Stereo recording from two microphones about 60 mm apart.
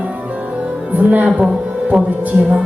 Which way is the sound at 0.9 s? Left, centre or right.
Right.